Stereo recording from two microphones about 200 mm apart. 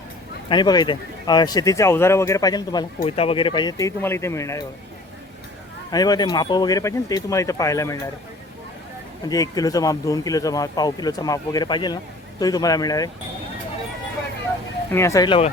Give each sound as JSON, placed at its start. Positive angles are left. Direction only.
{"t": 0.4, "sound": "speech", "side_deg": 20}
{"t": 5.9, "sound": "speech", "side_deg": 20}
{"t": 9.3, "sound": "speech", "side_deg": 20}
{"t": 14.9, "sound": "speech", "side_deg": 15}